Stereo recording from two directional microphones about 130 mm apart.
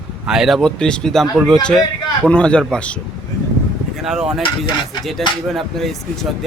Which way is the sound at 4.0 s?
5° right (ahead or behind).